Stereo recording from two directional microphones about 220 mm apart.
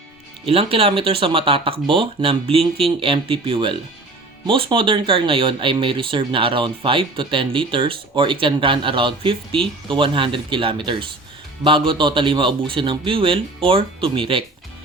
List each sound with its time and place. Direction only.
0.4 s speech: 25° right (ahead or behind)